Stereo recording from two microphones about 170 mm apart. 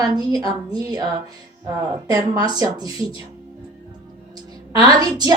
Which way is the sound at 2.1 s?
20° right (ahead or behind).